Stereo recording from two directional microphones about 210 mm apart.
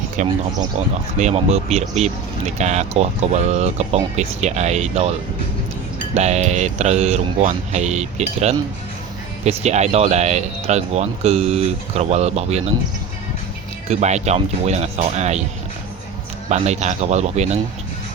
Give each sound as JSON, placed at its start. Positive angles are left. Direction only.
{"t": 0.2, "sound": "speech", "side_deg": -35}
{"t": 6.1, "sound": "speech", "side_deg": -30}
{"t": 13.8, "sound": "speech", "side_deg": -30}
{"t": 16.5, "sound": "speech", "side_deg": -30}